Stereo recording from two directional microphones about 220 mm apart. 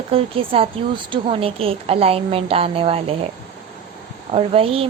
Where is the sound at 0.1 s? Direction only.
25° right (ahead or behind).